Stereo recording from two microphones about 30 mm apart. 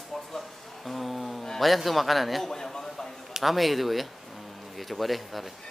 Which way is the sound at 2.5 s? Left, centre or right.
Left.